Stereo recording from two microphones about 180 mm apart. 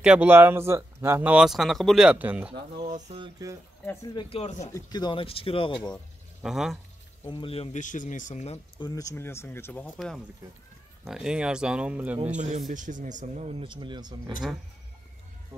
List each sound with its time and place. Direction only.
0.0 s speech: 5° right (ahead or behind)
3.2 s speech: 20° right (ahead or behind)
3.8 s speech: 15° left (ahead or behind)
4.4 s speech: 40° left (ahead or behind)
4.7 s speech: 20° left (ahead or behind)
6.4 s speech: centre (ahead or behind)
7.2 s speech: 30° left (ahead or behind)
8.7 s speech: 25° left (ahead or behind)
9.9 s speech: centre (ahead or behind)
12.4 s a man's voice: 40° right (ahead or behind)
13.6 s speech: 25° right (ahead or behind)